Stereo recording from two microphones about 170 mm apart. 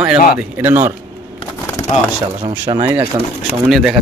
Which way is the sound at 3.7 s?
Centre (ahead or behind).